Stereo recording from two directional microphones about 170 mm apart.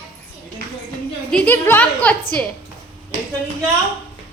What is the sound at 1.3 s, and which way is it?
Speech, 10° left (ahead or behind).